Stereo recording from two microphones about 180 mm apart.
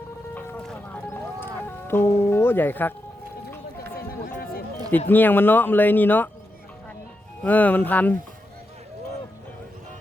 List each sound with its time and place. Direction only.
0.3 s music: 5° left (ahead or behind)
3.9 s a sound: 55° left (ahead or behind)
4.9 s speech: 10° left (ahead or behind)
7.4 s speech: 10° left (ahead or behind)